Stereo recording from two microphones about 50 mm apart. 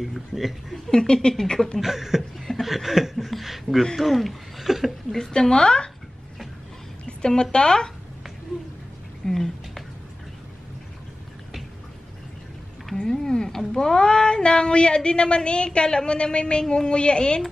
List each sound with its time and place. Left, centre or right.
0.0 s speech: centre
0.8 s speech: centre
1.8 s a sound: centre
2.3 s chuckle: centre
2.6 s speech: centre
5.1 s speech: centre
7.1 s a sound: centre
7.5 s speech: centre
9.2 s a sound: centre
12.9 s speech: centre